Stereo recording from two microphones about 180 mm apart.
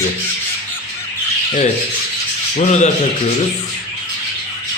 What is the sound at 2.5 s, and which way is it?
Speech, 40° left (ahead or behind).